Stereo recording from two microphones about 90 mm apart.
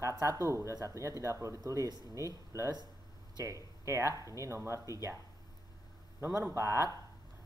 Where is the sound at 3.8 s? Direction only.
35° right (ahead or behind).